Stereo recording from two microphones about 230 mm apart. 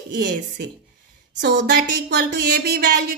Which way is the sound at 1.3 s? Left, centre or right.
Right.